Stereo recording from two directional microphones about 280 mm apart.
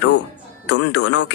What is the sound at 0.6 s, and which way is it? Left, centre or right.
Speech, left.